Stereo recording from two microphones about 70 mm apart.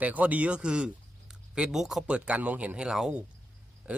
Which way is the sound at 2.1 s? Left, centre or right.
Centre.